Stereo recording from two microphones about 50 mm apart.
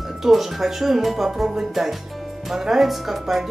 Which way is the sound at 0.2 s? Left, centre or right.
Centre.